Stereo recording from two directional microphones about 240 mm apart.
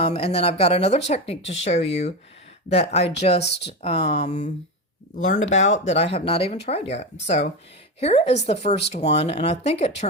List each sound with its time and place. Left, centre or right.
0.0 s speech: left
3.4 s speech: left
3.8 s speech: left